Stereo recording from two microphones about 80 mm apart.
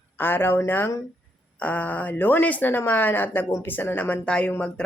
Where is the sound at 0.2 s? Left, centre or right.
Left.